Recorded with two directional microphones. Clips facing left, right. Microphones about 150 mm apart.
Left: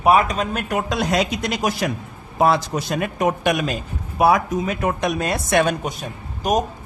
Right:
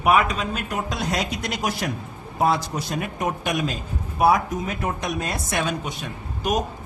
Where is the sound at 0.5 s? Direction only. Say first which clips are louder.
Left 5 dB; 75° left (ahead or behind).